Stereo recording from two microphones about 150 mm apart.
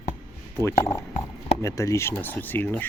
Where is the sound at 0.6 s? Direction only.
20° left (ahead or behind).